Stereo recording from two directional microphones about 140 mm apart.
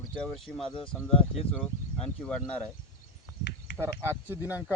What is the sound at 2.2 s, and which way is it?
Speech, 10° left (ahead or behind).